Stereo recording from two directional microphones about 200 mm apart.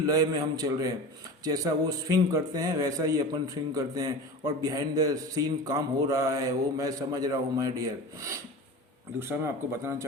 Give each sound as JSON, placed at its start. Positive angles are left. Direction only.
{"t": 0.0, "sound": "a man's voice", "side_deg": -15}